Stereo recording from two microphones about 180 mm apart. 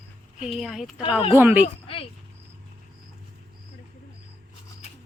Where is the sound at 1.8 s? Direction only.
30° left (ahead or behind).